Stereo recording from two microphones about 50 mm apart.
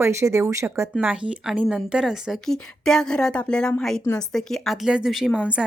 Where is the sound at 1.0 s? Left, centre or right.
Right; by 2.3 s centre.